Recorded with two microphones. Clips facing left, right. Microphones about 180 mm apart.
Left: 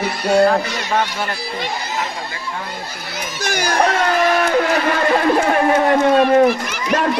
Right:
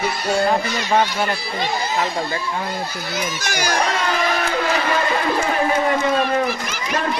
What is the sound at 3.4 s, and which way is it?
Speech, 55° left (ahead or behind).